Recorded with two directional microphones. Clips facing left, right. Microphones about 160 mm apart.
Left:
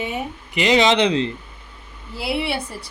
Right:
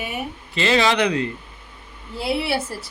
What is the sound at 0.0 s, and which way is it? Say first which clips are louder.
Speech: left 2 dB; 20° left (ahead or behind).